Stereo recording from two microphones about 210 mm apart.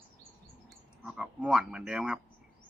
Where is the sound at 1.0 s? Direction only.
5° right (ahead or behind).